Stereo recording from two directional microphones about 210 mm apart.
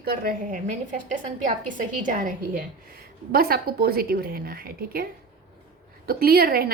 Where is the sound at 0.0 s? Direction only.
45° right (ahead or behind).